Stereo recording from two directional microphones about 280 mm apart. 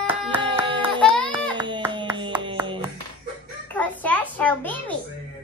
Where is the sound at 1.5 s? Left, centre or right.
Centre.